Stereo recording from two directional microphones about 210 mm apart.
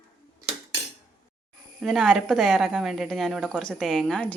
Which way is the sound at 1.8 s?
Centre (ahead or behind).